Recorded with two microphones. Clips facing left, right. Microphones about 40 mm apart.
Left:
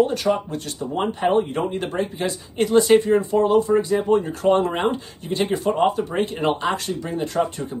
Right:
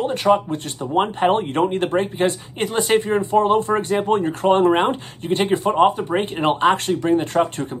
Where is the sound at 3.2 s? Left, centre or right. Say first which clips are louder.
Right 1 dB; right.